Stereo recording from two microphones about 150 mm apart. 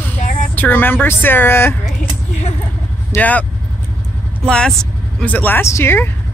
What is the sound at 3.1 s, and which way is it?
Speech, 10° left (ahead or behind).